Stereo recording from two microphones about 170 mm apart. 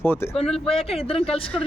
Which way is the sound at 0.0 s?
10° left (ahead or behind).